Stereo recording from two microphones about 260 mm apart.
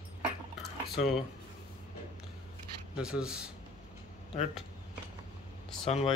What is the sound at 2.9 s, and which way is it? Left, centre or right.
Speech, centre.